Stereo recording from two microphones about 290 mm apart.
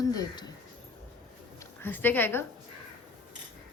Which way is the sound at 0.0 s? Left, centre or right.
Centre.